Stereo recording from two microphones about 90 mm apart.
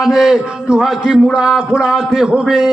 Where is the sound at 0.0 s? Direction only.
5° right (ahead or behind).